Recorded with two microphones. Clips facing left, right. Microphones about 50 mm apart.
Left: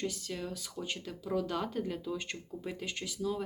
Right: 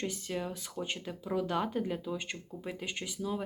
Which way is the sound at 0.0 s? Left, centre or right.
Right.